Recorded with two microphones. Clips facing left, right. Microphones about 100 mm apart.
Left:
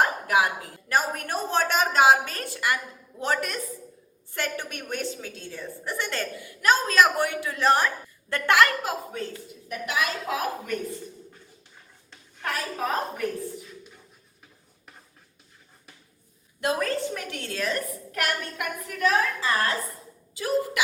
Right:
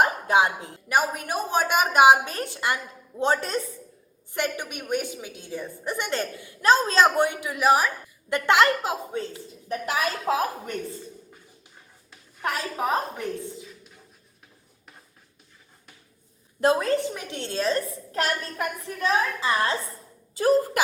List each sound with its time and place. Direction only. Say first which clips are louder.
0.0 s a woman's voice: right 2 dB; 25° right (ahead or behind)
4.4 s a woman's voice: right 2 dB; 15° right (ahead or behind)
8.3 s a woman's voice: right 1 dB; 20° right (ahead or behind)
9.7 s a woman's voice: right 2 dB; 35° right (ahead or behind)
12.4 s a woman's voice: right 2 dB; 20° right (ahead or behind)
16.6 s a woman's voice: right 6 dB; 35° right (ahead or behind)
16.8 s a woman's voice: right 3 dB; 20° right (ahead or behind)
20.3 s speech: right 5 dB; 40° right (ahead or behind)